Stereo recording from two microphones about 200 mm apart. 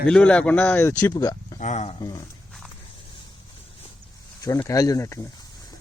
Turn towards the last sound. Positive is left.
turn(degrees=15)  # may be behind; listen again after turning